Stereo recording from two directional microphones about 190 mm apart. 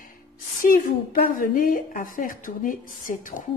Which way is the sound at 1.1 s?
50° left (ahead or behind).